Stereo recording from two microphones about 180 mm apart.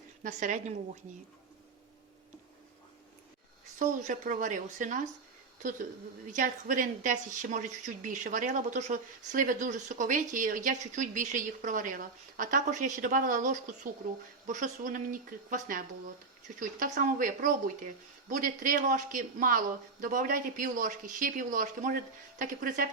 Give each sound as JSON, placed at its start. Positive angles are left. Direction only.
{"t": 0.2, "sound": "a woman's voice", "side_deg": -45}
{"t": 3.8, "sound": "a woman's voice", "side_deg": -45}
{"t": 6.3, "sound": "a woman's voice", "side_deg": -45}